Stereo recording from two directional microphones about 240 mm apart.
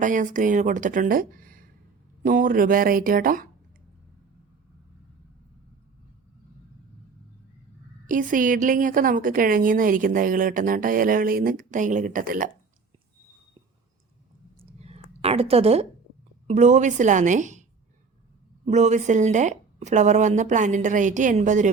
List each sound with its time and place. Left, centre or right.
0.0 s a woman's voice: right
8.0 s a woman's voice: right
14.6 s a sound: right
16.5 s a woman's voice: right